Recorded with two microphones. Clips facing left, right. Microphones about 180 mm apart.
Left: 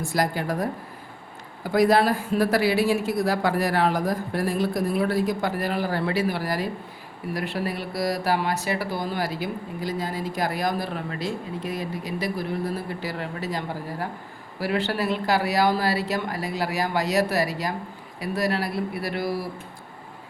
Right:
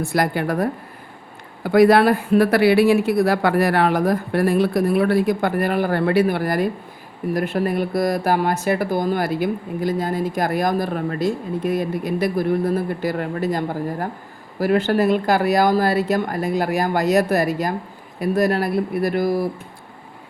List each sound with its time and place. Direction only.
0.0 s speech: 60° right (ahead or behind)